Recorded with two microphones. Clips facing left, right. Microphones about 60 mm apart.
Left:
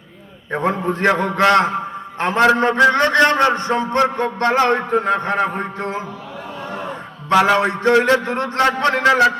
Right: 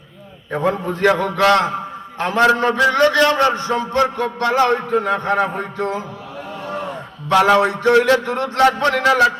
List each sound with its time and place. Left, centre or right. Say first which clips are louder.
0.5 s a man's voice: even; left
7.5 s a man's voice: right 1 dB; left